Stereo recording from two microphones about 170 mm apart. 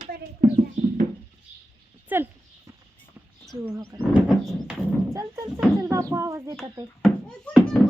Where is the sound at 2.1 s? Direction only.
10° right (ahead or behind).